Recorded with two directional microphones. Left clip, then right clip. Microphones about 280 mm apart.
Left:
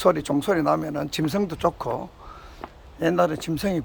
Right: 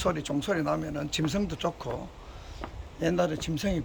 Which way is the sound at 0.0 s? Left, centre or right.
Centre.